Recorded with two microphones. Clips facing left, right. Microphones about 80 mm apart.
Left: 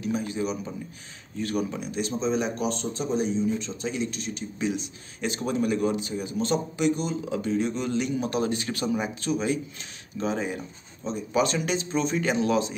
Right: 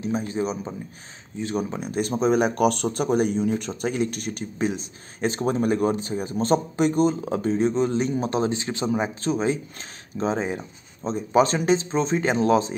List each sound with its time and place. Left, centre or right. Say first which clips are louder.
0.0 s a man's voice: right 2 dB; right
1.7 s a man's voice: right 4 dB; right